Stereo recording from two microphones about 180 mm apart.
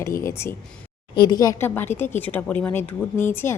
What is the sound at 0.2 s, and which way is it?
A woman's voice, 15° left (ahead or behind).